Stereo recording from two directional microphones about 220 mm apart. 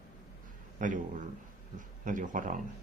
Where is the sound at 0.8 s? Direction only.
35° right (ahead or behind).